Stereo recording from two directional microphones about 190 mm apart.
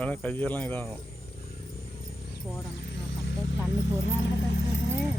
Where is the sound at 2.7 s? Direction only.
65° left (ahead or behind).